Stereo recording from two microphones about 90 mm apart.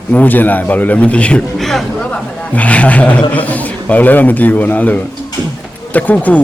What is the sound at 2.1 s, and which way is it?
Speech, 15° left (ahead or behind).